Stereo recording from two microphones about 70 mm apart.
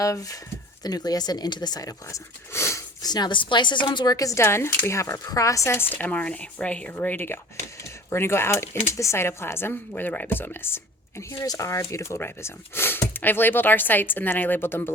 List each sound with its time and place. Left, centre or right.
0.0 s speech: left
0.8 s speech: left
2.0 s speech: left
3.0 s speech: left
4.4 s a woman's voice: left
5.7 s speech: left
9.9 s speech: left
11.2 s a woman's voice: left